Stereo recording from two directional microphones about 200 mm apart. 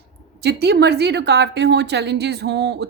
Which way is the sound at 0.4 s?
55° right (ahead or behind).